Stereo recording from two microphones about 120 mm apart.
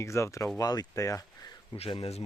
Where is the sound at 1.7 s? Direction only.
55° left (ahead or behind).